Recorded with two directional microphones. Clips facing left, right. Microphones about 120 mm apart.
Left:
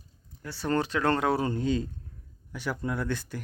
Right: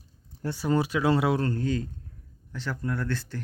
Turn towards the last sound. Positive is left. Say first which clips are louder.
# even
turn(degrees=15)  # may be behind; listen again after turning